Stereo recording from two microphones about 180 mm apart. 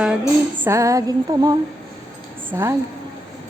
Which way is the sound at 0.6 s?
15° right (ahead or behind).